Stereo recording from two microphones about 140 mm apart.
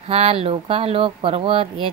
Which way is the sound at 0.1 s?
45° right (ahead or behind).